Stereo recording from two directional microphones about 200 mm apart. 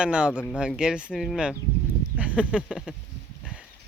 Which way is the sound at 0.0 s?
5° right (ahead or behind).